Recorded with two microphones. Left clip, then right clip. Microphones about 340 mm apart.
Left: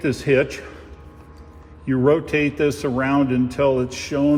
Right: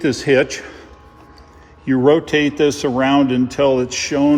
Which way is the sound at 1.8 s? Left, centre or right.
Right.